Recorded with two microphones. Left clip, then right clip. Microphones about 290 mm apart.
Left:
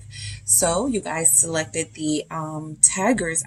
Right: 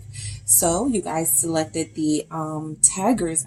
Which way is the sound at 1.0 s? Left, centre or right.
Left.